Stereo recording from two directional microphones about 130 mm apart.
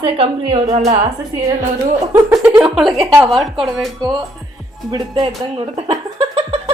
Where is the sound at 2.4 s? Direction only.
10° right (ahead or behind).